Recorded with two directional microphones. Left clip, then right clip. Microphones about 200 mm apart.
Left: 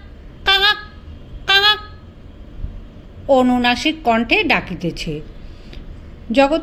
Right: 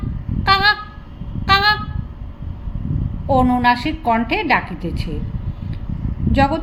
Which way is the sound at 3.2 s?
35° left (ahead or behind).